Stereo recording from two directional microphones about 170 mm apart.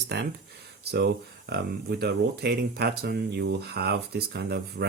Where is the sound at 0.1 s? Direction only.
75° right (ahead or behind).